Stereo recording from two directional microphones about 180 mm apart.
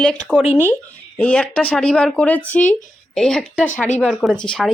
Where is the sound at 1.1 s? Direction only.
5° left (ahead or behind).